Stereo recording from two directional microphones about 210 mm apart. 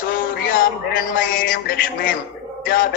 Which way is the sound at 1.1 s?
40° left (ahead or behind).